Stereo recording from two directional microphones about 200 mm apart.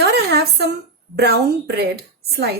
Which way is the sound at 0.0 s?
55° right (ahead or behind).